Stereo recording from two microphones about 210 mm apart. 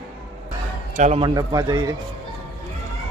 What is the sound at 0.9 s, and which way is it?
Speech, 35° right (ahead or behind).